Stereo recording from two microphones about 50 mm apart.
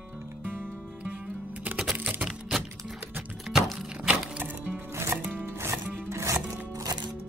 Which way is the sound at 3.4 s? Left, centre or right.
Centre.